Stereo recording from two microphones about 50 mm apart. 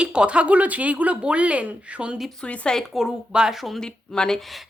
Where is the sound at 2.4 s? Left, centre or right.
Centre.